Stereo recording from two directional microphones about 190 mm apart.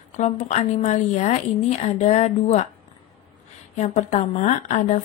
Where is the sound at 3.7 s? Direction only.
40° left (ahead or behind).